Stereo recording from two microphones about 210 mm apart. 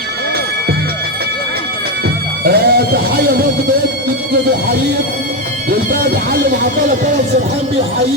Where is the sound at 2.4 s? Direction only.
45° right (ahead or behind).